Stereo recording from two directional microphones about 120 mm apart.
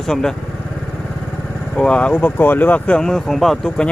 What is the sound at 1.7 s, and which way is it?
Speech, 10° left (ahead or behind).